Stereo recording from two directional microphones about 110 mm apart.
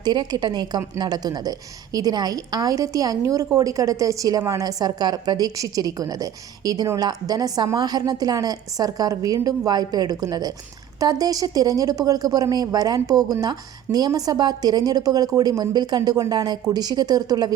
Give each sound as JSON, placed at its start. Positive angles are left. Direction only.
{"t": 0.0, "sound": "a woman's voice", "side_deg": -40}